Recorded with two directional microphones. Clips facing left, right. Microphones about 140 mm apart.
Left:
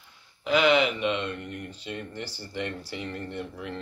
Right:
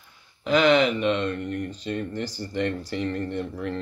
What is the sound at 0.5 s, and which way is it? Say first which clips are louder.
Speech: right 3 dB; 10° left (ahead or behind).